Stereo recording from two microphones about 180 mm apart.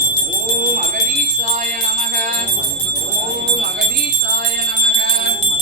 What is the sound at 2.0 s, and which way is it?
Music, 50° right (ahead or behind).